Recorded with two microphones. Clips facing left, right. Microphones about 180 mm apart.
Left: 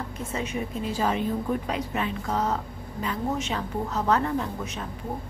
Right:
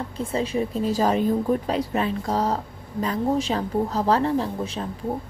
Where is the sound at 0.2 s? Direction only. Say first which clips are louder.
Right 7 dB; 30° right (ahead or behind).